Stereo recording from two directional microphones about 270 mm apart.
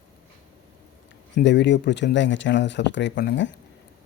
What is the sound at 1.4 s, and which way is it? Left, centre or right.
A man's voice, left.